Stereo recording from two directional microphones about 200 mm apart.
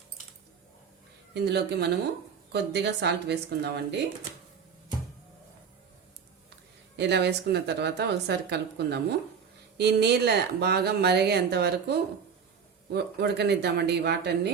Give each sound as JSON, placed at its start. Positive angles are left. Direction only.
{"t": 1.3, "sound": "speech", "side_deg": -55}
{"t": 6.9, "sound": "speech", "side_deg": -60}